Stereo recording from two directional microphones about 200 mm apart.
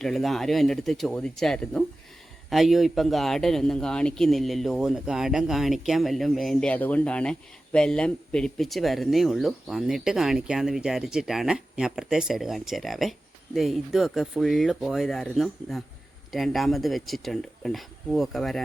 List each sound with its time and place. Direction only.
0.0 s a man's voice: centre (ahead or behind)